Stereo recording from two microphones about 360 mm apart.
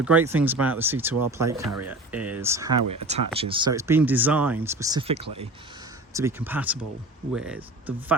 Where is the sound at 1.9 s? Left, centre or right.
Centre.